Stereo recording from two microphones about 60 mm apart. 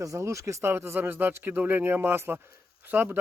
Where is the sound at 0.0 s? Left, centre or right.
Right.